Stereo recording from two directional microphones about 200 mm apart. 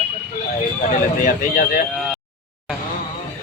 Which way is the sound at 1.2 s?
40° left (ahead or behind).